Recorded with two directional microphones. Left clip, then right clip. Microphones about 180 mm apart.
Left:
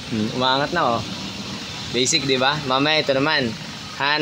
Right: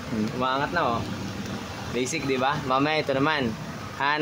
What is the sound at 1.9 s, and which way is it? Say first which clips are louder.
A man's voice: left 8 dB; 25° left (ahead or behind).